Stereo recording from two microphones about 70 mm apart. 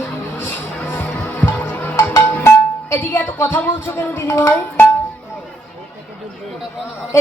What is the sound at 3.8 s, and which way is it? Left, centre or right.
Speech, left.